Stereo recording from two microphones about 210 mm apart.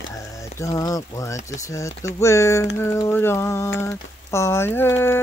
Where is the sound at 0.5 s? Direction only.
15° left (ahead or behind).